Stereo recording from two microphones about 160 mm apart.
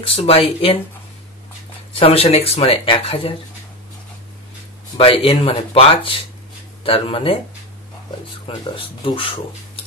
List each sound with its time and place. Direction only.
0.0 s speech: 35° left (ahead or behind)
2.0 s speech: 35° left (ahead or behind)
4.9 s speech: 35° left (ahead or behind)
8.5 s speech: 35° left (ahead or behind)